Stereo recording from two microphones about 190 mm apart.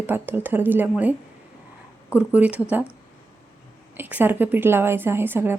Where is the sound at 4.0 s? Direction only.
10° right (ahead or behind).